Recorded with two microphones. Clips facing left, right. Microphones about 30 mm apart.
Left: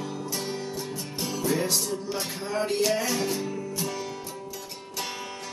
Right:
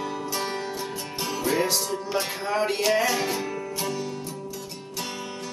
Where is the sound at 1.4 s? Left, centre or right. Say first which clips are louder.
Right 2 dB; right.